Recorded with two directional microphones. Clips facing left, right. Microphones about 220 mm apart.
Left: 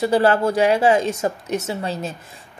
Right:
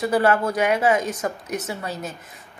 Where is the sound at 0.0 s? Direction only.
30° left (ahead or behind).